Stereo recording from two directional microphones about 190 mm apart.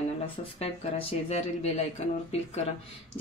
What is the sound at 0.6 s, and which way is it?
Speech, 30° left (ahead or behind).